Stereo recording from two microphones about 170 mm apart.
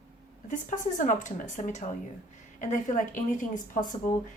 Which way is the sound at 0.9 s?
50° left (ahead or behind).